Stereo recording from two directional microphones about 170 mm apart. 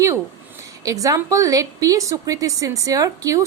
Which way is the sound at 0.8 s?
20° right (ahead or behind).